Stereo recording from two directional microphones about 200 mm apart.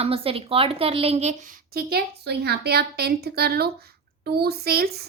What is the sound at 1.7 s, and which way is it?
Speech, 50° right (ahead or behind).